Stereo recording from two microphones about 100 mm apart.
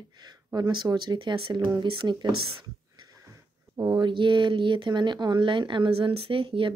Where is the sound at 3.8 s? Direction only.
45° right (ahead or behind).